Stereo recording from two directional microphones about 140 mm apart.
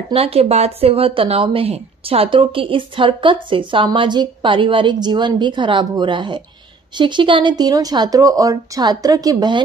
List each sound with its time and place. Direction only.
0.1 s speech: 45° right (ahead or behind); by 9.6 s 30° right (ahead or behind)